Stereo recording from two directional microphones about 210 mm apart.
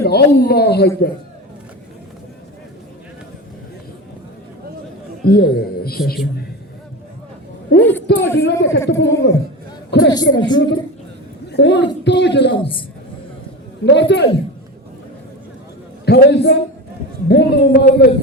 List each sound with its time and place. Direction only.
0.0 s a man's voice: 50° left (ahead or behind)
5.2 s a man's voice: 45° left (ahead or behind)
7.8 s a man's voice: 10° left (ahead or behind)
8.0 s a man's voice: 60° left (ahead or behind)
10.3 s a woman's voice: 20° left (ahead or behind)
11.5 s a man's voice: 55° left (ahead or behind)
12.5 s a woman's voice: 25° left (ahead or behind)
13.8 s a man's voice: 55° left (ahead or behind)
16.0 s a man's voice: 50° left (ahead or behind)